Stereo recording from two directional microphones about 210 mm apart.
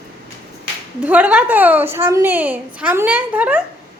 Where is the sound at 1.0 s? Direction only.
5° right (ahead or behind).